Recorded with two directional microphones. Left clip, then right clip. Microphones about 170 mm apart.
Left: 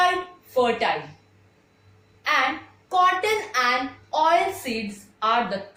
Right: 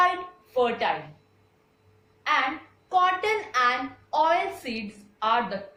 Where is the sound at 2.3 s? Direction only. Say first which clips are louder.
Left 2 dB; 15° right (ahead or behind).